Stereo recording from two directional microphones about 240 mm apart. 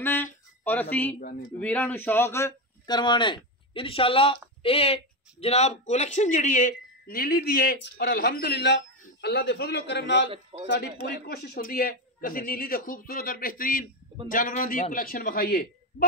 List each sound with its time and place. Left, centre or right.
0.0 s a sound: centre
1.2 s a man's voice: left
1.6 s a man's voice: centre; by 10.2 s left
10.3 s a man's voice: right
10.7 s a man's voice: left